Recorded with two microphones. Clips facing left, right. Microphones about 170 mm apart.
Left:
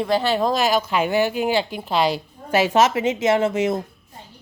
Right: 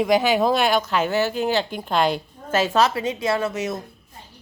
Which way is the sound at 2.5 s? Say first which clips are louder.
Left 2 dB; 15° left (ahead or behind).